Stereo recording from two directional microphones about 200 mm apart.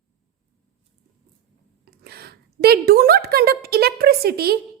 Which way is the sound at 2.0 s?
50° right (ahead or behind).